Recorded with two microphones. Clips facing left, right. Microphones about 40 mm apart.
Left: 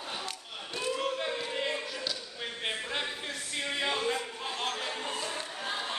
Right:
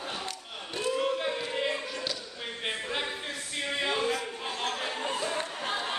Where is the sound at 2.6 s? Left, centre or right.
Centre.